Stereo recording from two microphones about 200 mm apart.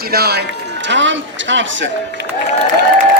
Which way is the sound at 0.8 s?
65° right (ahead or behind).